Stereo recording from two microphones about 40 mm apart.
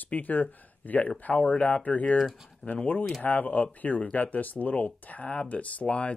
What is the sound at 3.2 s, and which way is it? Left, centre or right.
Speech, left.